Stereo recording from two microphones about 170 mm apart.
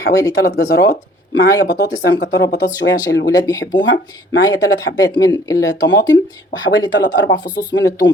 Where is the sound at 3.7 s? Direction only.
90° left.